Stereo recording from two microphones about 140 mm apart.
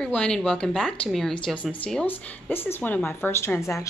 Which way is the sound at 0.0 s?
5° left (ahead or behind).